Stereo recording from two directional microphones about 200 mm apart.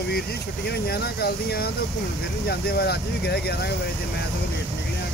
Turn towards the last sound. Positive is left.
turn(degrees=55)  # may be behind; listen again after turning